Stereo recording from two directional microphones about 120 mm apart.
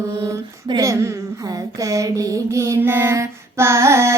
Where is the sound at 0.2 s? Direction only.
35° right (ahead or behind).